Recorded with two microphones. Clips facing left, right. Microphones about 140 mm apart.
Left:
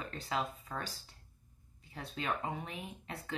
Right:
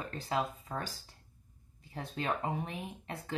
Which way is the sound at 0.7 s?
35° right (ahead or behind).